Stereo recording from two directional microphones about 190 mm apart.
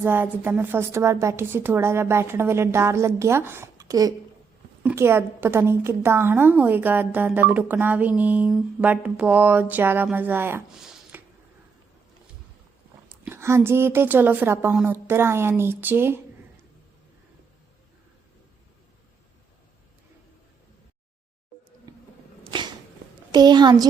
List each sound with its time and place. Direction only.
0.0 s a woman's voice: 10° right (ahead or behind)
13.2 s a woman's voice: 15° right (ahead or behind)
22.5 s a sound: 25° right (ahead or behind)
23.3 s a child's voice: 20° right (ahead or behind)